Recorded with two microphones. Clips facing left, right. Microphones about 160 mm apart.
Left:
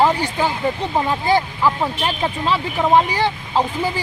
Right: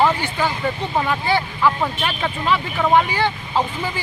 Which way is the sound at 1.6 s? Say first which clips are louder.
Even; 15° left (ahead or behind).